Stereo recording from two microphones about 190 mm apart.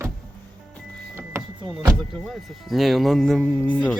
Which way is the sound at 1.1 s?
15° right (ahead or behind).